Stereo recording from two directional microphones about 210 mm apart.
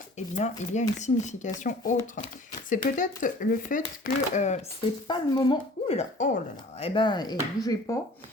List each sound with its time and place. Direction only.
0.3 s speech: 35° left (ahead or behind)
5.0 s speech: 20° left (ahead or behind)